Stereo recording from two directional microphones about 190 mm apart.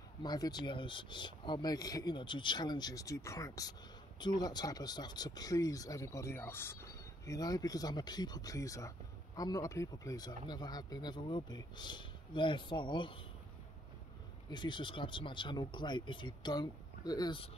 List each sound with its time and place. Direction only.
0.2 s speech: 20° left (ahead or behind)
14.5 s speech: 25° left (ahead or behind)